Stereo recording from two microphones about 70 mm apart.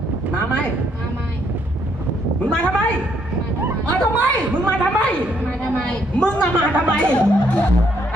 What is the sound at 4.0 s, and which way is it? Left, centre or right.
A woman's voice, centre.